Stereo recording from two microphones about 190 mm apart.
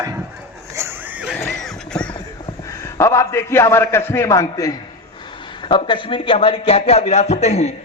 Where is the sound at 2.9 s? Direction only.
15° left (ahead or behind).